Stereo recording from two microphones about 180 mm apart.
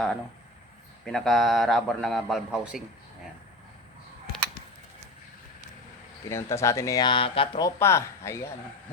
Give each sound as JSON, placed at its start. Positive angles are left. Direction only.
{"t": 1.0, "sound": "a man's voice", "side_deg": 0}
{"t": 6.2, "sound": "speech", "side_deg": 15}
{"t": 7.8, "sound": "speech", "side_deg": 15}